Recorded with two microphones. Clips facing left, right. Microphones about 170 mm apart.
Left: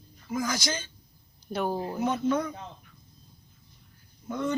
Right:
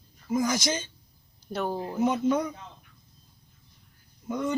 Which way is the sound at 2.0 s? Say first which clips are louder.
Right 3 dB; 15° right (ahead or behind).